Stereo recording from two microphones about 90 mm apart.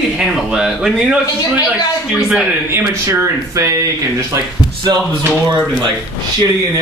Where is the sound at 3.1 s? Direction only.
35° right (ahead or behind).